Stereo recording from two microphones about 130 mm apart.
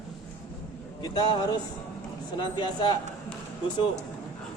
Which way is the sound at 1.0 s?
30° left (ahead or behind).